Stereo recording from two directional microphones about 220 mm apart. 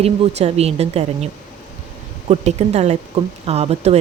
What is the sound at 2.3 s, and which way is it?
A woman's voice, 30° right (ahead or behind).